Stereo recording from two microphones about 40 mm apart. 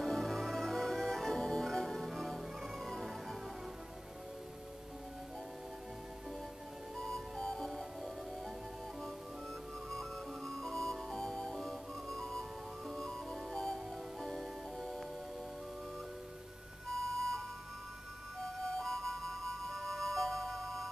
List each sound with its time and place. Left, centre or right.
0.0 s music: centre
7.0 s music: centre
9.8 s music: centre
14.2 s music: centre
17.2 s music: centre